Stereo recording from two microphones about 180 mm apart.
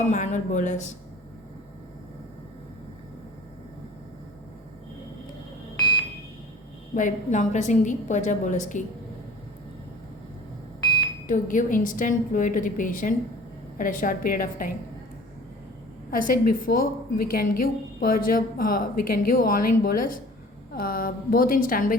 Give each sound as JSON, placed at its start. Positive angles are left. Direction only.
{"t": 0.1, "sound": "a woman's voice", "side_deg": 40}
{"t": 5.7, "sound": "a sound", "side_deg": 20}
{"t": 6.9, "sound": "a woman's voice", "side_deg": 45}
{"t": 11.3, "sound": "a woman's voice", "side_deg": 45}
{"t": 16.1, "sound": "a woman's voice", "side_deg": 50}